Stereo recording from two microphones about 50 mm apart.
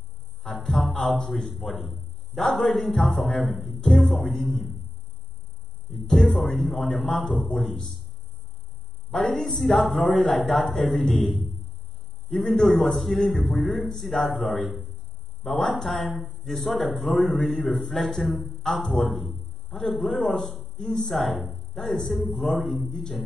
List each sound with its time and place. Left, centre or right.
0.4 s a man's voice: centre
6.0 s a man's voice: centre
9.1 s a man's voice: centre
12.3 s speech: centre
12.6 s a man's voice: centre
17.9 s a man's voice: centre